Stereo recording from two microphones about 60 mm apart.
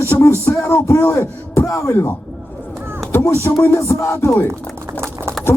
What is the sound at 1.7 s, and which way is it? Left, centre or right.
Music, left.